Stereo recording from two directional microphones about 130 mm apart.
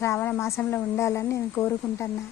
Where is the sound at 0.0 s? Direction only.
20° left (ahead or behind).